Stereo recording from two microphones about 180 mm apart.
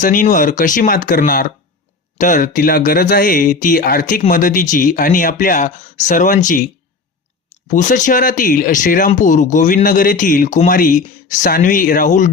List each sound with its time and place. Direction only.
0.0 s speech: 45° left (ahead or behind)
7.7 s speech: 45° left (ahead or behind)